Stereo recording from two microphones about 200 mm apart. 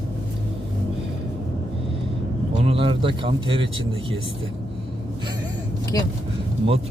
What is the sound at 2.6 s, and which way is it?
Speech, 30° right (ahead or behind).